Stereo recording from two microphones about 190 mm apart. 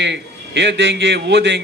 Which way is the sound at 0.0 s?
65° right (ahead or behind).